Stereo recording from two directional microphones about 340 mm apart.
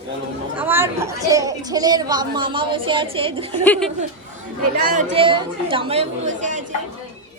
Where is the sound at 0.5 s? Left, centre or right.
Centre.